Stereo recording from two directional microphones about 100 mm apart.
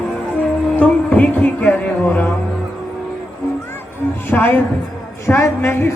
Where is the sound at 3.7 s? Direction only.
20° left (ahead or behind).